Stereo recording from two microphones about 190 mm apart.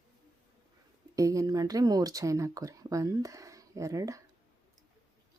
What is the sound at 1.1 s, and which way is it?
Speech, 15° right (ahead or behind).